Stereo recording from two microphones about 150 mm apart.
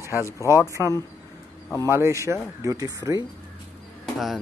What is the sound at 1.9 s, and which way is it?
Speech, 20° right (ahead or behind).